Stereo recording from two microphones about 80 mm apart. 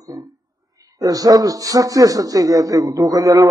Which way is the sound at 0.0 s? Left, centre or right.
Right.